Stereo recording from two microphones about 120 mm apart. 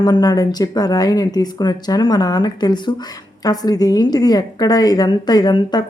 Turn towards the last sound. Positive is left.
turn(degrees=35)  # may be behind; listen again after turning